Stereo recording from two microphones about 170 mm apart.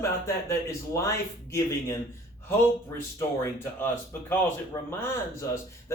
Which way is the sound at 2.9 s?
15° left (ahead or behind).